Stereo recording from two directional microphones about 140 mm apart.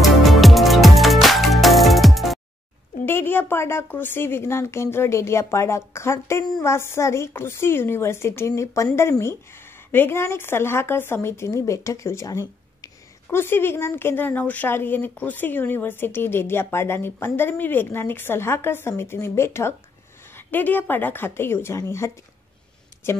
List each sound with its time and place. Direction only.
0.0 s music: centre (ahead or behind)
3.1 s a woman's voice: 15° left (ahead or behind)